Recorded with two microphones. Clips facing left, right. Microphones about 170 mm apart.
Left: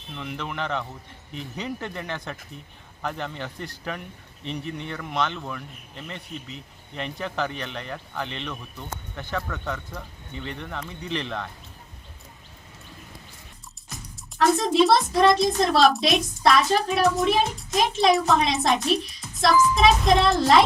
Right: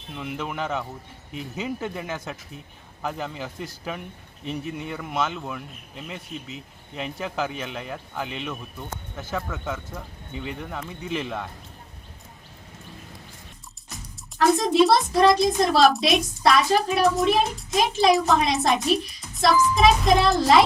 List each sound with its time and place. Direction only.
0.1 s a woman's voice: 5° right (ahead or behind)
14.3 s a woman's voice: centre (ahead or behind)